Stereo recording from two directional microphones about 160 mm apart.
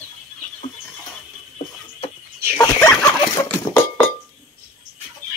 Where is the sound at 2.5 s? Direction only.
15° left (ahead or behind).